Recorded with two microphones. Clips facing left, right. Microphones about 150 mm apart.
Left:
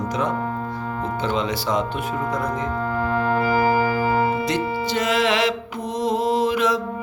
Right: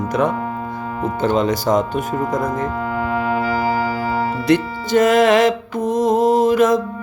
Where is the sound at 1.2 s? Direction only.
45° right (ahead or behind).